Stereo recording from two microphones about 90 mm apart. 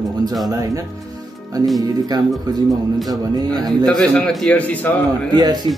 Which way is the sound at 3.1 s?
45° right (ahead or behind).